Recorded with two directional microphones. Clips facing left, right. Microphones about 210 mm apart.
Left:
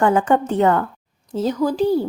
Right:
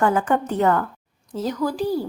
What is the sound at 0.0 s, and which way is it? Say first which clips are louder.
Speech: left 3 dB; 25° left (ahead or behind).